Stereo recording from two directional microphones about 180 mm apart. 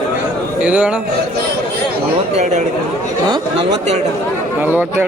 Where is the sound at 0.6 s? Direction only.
5° right (ahead or behind).